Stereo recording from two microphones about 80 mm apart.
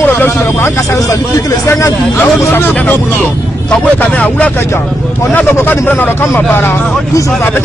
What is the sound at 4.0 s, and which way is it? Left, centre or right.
Speech, left.